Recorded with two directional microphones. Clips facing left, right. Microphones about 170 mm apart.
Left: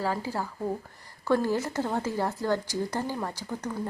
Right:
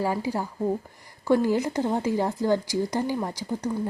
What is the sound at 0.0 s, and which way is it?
Speech, 15° right (ahead or behind).